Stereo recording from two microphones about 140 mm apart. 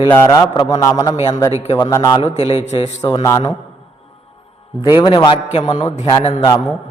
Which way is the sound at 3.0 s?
25° left (ahead or behind).